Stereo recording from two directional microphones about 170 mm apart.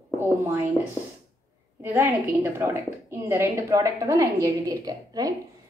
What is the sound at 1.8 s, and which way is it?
A woman's voice, 10° right (ahead or behind).